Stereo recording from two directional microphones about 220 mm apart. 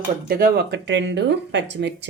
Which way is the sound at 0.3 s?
45° right (ahead or behind).